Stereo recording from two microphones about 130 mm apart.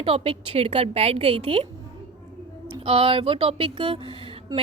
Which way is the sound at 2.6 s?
45° right (ahead or behind).